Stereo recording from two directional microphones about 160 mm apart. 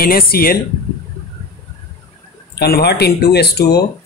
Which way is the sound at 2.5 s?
80° left.